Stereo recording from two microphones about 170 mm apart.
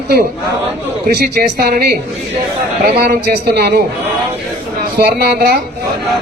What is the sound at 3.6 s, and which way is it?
Speech, 65° right (ahead or behind).